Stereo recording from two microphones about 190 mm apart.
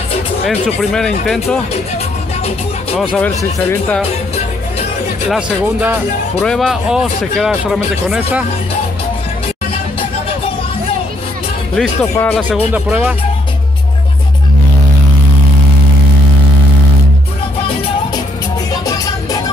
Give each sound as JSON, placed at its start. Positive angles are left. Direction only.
{"t": 0.5, "sound": "speech", "side_deg": 5}
{"t": 5.3, "sound": "speech", "side_deg": -10}
{"t": 6.4, "sound": "speech", "side_deg": 0}
{"t": 11.7, "sound": "speech", "side_deg": 10}
{"t": 12.7, "sound": "speech", "side_deg": -10}